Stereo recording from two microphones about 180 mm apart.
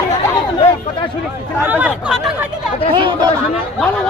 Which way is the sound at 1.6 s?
10° right (ahead or behind).